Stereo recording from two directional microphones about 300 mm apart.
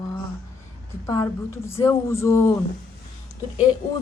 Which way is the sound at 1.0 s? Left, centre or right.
Centre.